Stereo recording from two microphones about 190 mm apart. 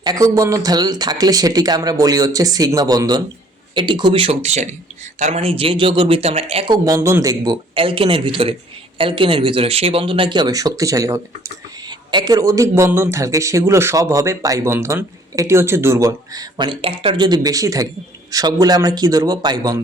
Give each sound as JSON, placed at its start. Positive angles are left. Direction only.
{"t": 0.0, "sound": "speech", "side_deg": -20}
{"t": 6.8, "sound": "speech", "side_deg": -15}